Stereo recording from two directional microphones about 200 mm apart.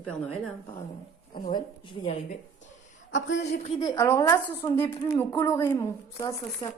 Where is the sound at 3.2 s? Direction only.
65° left (ahead or behind).